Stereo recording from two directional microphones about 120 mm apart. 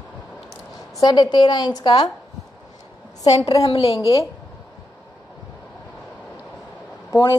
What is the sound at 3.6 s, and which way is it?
Speech, 55° left (ahead or behind).